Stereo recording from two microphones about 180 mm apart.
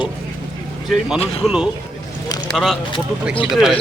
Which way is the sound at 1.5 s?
5° right (ahead or behind).